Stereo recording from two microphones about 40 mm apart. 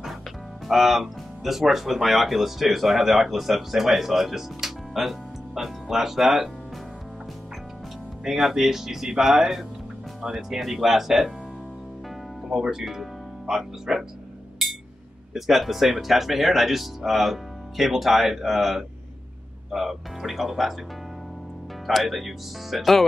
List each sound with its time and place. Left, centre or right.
0.7 s speech: centre
8.2 s speech: centre
12.4 s speech: centre
12.8 s speech: centre
13.6 s speech: centre
15.3 s speech: centre
21.8 s speech: centre